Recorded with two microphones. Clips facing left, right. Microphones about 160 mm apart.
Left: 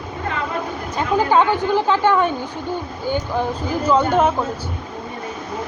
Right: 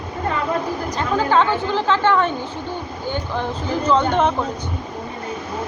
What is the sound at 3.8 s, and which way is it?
Speech, 10° left (ahead or behind).